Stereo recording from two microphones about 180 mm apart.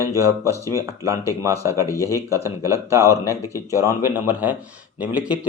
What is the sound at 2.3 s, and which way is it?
Speech, 15° right (ahead or behind).